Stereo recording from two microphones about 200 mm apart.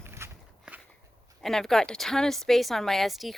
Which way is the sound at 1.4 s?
Centre (ahead or behind).